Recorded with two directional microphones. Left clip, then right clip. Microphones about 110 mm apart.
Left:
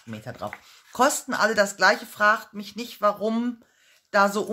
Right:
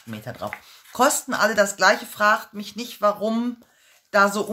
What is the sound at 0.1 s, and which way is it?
Speech, 25° left (ahead or behind).